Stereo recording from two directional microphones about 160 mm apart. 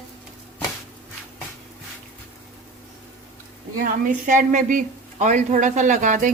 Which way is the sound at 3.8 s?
55° right (ahead or behind).